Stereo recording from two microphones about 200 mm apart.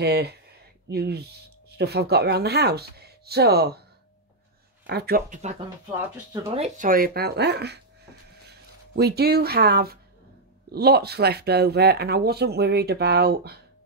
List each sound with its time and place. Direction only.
0.0 s speech: 55° right (ahead or behind)
4.8 s speech: 55° right (ahead or behind)
5.9 s speech: 10° right (ahead or behind)
6.5 s speech: 35° right (ahead or behind); by 13.6 s 50° right (ahead or behind)